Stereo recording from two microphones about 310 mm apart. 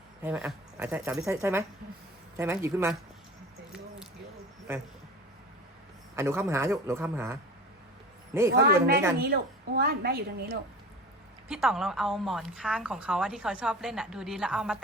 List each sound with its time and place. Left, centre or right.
0.2 s speech: centre
6.1 s speech: centre
9.1 s a woman's voice: right
11.4 s a woman's voice: centre